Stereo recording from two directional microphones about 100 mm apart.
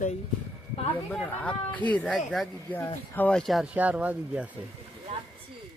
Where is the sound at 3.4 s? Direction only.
Centre (ahead or behind).